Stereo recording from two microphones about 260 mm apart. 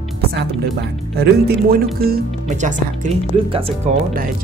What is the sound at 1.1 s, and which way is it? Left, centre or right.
Speech, right.